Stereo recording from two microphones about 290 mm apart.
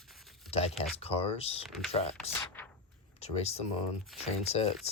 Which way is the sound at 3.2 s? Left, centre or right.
Left.